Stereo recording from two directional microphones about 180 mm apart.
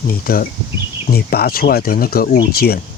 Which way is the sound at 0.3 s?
50° left (ahead or behind).